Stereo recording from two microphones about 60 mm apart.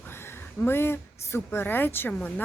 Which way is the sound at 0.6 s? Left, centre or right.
Left.